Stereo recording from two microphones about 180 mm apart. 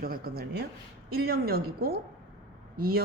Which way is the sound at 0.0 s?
60° right (ahead or behind).